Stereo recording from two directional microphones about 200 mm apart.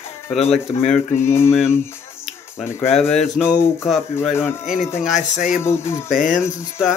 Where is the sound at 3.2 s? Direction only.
5° right (ahead or behind).